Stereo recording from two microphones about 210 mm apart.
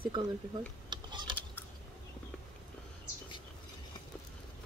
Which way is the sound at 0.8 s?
20° right (ahead or behind).